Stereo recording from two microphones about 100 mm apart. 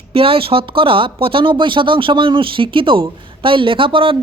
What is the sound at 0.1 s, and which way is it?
A woman's voice, 70° right (ahead or behind).